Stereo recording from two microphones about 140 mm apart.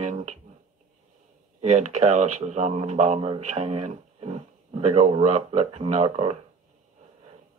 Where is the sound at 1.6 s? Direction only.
60° right (ahead or behind).